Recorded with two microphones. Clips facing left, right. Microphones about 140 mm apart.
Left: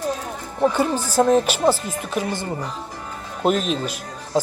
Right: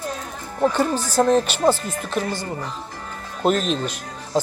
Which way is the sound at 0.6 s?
10° left (ahead or behind).